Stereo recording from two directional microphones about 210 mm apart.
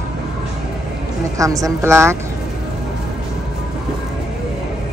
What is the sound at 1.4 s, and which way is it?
Speech, 15° right (ahead or behind).